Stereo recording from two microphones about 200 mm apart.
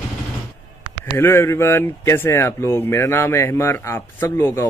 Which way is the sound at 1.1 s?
10° left (ahead or behind).